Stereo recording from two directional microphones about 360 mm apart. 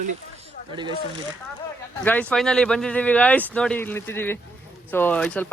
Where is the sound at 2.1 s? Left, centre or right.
Centre.